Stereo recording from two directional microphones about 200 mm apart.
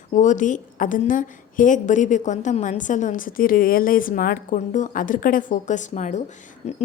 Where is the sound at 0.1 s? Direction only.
40° left (ahead or behind).